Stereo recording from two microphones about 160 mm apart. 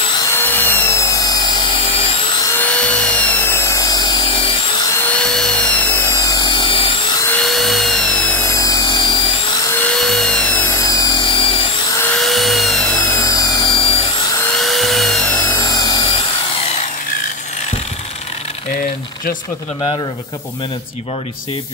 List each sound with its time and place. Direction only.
0.3 s wood: 10° left (ahead or behind)
2.5 s tools: 10° left (ahead or behind)
5.1 s tools: 5° left (ahead or behind); by 7.0 s 35° left (ahead or behind)
7.4 s tools: centre (ahead or behind); by 9.3 s 30° left (ahead or behind)
9.7 s drill: 10° left (ahead or behind)
9.9 s tools: centre (ahead or behind); by 11.6 s 30° left (ahead or behind)
12.0 s music: 5° left (ahead or behind); by 13.9 s 30° left (ahead or behind)
14.5 s tools: centre (ahead or behind); by 16.2 s 30° left (ahead or behind)